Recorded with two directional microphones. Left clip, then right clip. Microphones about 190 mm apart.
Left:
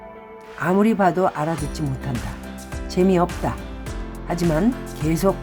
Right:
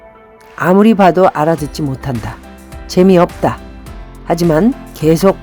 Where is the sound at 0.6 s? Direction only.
45° right (ahead or behind).